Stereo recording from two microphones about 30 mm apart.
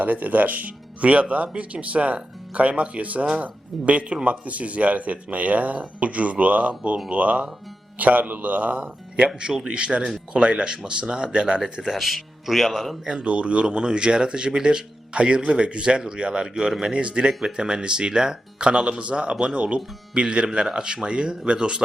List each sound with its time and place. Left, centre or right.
0.0 s speech: right
9.6 s speech: right
11.9 s speech: centre
13.2 s speech: right
17.4 s speech: right
20.2 s speech: right